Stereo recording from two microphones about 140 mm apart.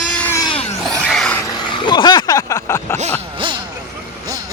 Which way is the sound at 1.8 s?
30° left (ahead or behind).